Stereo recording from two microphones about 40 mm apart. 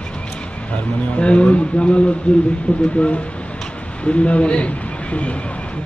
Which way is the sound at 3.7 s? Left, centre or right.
Left.